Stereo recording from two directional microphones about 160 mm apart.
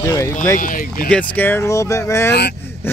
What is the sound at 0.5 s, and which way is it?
Speech, 60° left (ahead or behind).